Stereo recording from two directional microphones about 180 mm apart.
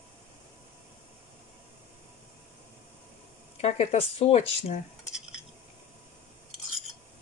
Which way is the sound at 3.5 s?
35° left (ahead or behind).